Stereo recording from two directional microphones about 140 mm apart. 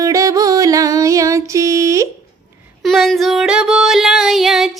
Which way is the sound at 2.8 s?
Centre (ahead or behind).